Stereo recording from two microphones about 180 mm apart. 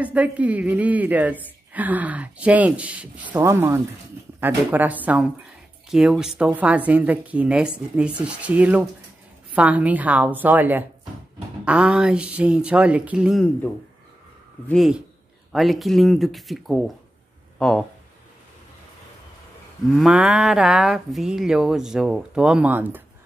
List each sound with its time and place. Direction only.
0.0 s a woman's voice: 10° right (ahead or behind)
14.7 s speech: centre (ahead or behind)
20.0 s speech: 5° right (ahead or behind)